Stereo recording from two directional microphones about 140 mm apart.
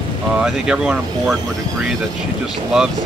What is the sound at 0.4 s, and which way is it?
Speech, 5° right (ahead or behind).